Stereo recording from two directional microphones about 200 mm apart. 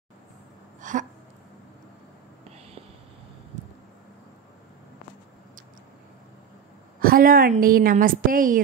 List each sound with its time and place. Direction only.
0.7 s hiccup: 40° right (ahead or behind)
7.0 s a woman's voice: 45° right (ahead or behind)